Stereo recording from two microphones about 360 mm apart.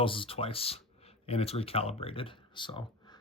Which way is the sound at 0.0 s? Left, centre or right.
Centre.